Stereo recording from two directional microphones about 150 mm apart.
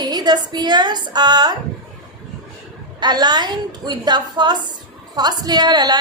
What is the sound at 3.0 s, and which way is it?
A woman's voice, 30° right (ahead or behind).